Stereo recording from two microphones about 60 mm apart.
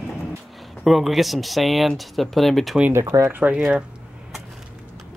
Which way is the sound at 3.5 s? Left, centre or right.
Centre.